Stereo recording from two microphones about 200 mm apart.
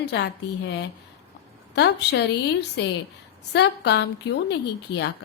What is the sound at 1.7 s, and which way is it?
Speech, 55° left (ahead or behind).